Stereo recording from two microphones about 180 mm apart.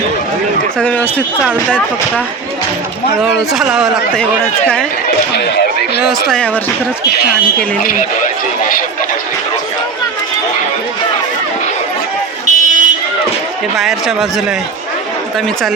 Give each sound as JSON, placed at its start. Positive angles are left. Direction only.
{"t": 0.8, "sound": "speech", "side_deg": 5}
{"t": 3.5, "sound": "speech", "side_deg": -5}
{"t": 12.5, "sound": "vehicle", "side_deg": -45}
{"t": 13.7, "sound": "speech", "side_deg": 0}